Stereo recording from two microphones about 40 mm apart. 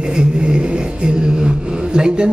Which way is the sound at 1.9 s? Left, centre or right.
Centre.